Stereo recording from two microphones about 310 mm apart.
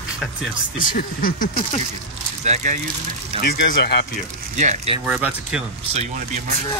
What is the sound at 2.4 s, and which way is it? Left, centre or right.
Speech, right.